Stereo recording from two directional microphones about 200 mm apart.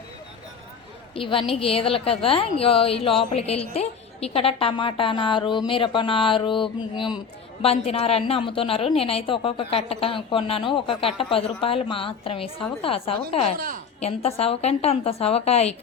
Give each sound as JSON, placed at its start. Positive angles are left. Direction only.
{"t": 1.1, "sound": "a woman's voice", "side_deg": 25}